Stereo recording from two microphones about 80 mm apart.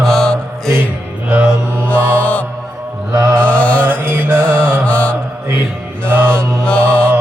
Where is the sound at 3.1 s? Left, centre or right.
Right.